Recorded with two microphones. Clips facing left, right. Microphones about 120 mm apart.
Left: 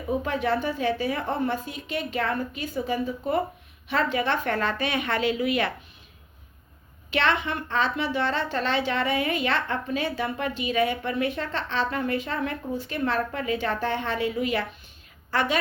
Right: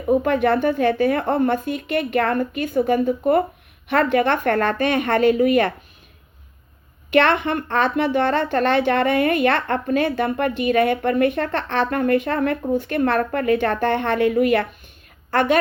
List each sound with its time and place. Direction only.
0.1 s a woman's voice: 55° right (ahead or behind)
7.1 s a woman's voice: 55° right (ahead or behind)